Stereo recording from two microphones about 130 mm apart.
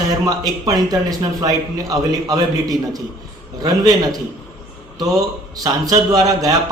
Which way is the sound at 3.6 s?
30° right (ahead or behind).